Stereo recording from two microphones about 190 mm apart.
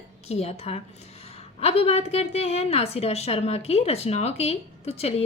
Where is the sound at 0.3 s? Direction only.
35° left (ahead or behind).